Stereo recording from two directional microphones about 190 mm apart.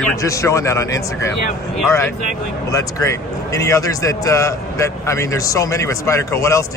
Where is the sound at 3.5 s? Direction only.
15° left (ahead or behind).